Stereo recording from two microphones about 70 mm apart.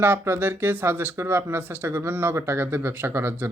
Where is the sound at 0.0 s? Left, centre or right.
Right.